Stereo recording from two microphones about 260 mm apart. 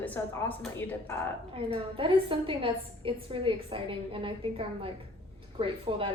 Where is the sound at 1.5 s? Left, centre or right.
Right.